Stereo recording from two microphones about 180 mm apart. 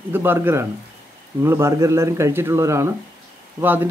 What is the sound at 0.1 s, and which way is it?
A man's voice, 10° right (ahead or behind).